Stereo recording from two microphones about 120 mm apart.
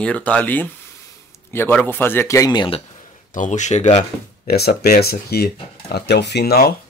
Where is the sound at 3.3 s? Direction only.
90° left; by 4.1 s 70° left (ahead or behind).